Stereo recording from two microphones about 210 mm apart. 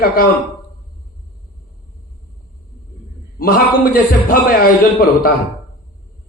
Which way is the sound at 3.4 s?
45° left (ahead or behind).